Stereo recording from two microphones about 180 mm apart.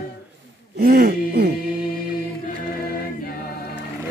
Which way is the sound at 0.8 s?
60° right (ahead or behind).